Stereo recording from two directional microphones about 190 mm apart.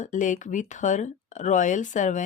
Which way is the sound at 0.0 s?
40° left (ahead or behind).